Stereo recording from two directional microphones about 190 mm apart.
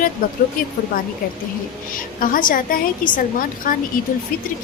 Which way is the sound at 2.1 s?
45° left (ahead or behind).